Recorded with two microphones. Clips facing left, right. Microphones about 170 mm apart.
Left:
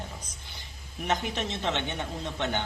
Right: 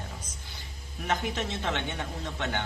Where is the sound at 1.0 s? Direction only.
20° left (ahead or behind).